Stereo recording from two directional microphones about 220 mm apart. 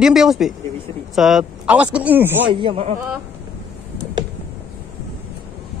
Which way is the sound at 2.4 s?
25° right (ahead or behind).